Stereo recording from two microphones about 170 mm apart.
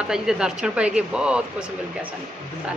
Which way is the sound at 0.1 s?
5° right (ahead or behind).